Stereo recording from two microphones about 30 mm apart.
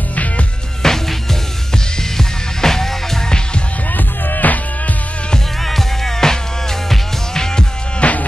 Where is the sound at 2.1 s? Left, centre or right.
Centre.